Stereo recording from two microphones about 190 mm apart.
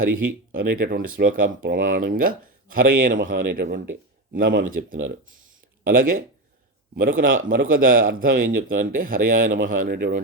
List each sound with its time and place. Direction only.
0.6 s a man's voice: 50° right (ahead or behind)